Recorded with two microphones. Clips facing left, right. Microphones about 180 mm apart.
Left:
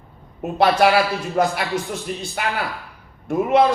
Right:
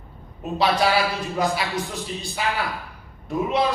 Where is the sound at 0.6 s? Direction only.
60° left (ahead or behind).